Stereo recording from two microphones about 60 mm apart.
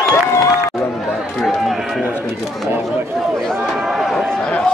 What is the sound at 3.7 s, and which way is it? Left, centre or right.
Run, centre.